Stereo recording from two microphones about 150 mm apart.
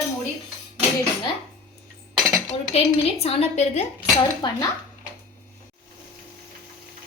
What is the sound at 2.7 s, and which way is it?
A woman's voice, 40° left (ahead or behind).